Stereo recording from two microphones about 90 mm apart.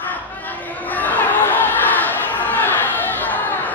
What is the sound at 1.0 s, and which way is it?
Chatter, 20° left (ahead or behind).